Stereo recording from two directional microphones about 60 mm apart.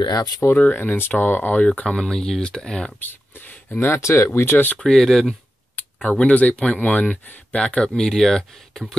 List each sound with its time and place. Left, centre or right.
0.6 s speech: left
0.9 s speech: left
1.9 s speech: centre
3.0 s a sound: left
3.9 s speech: left
4.7 s speech: centre
6.0 s speech: left
7.9 s speech: centre